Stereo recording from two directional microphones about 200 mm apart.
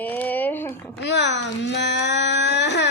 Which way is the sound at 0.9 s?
60° left (ahead or behind).